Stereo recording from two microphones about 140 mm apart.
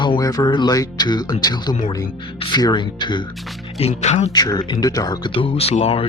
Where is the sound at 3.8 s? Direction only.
50° left (ahead or behind).